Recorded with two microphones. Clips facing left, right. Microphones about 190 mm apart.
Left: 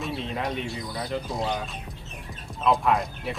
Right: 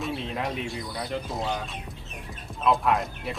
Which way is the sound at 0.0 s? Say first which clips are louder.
Even; centre (ahead or behind).